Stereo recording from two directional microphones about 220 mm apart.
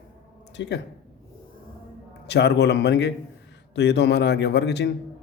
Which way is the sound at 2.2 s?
50° left (ahead or behind).